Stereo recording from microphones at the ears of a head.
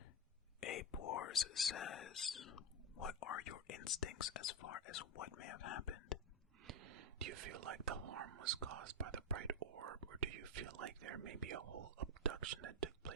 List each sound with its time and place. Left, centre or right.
0.6 s whispering: left
6.7 s speech: right